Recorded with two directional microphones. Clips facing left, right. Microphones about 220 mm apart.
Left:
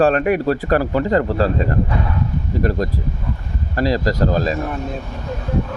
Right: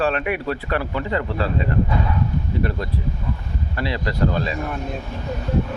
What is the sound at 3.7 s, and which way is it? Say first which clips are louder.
Speech: left 7 dB; 40° left (ahead or behind).